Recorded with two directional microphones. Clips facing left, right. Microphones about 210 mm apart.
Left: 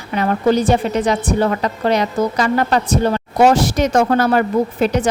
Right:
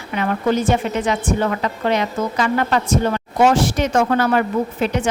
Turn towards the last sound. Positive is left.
turn(degrees=40)  # may be behind; listen again after turning